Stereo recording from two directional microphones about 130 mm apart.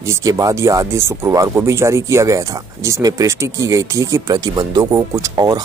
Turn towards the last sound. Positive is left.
turn(degrees=-30)  # may be behind; listen again after turning